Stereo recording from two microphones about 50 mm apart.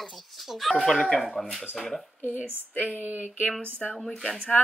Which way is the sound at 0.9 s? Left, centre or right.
Centre.